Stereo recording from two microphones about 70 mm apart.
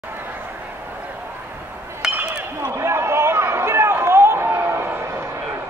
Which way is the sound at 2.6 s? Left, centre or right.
Right.